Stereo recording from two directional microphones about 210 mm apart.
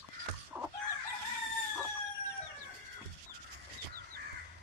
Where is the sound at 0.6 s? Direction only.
10° right (ahead or behind).